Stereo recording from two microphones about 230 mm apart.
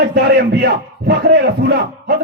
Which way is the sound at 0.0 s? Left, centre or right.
Right.